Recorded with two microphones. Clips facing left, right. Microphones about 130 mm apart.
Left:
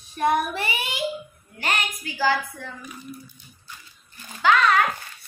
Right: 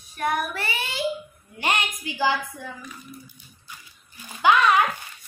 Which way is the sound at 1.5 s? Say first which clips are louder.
Right 2 dB; 20° right (ahead or behind).